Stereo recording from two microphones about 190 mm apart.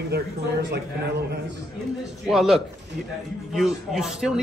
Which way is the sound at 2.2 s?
Centre (ahead or behind).